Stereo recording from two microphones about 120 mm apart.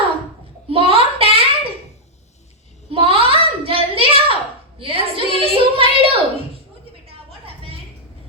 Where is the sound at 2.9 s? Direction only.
55° right (ahead or behind).